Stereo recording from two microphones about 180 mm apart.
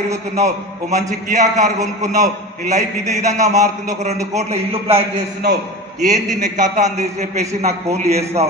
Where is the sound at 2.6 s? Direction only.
40° right (ahead or behind).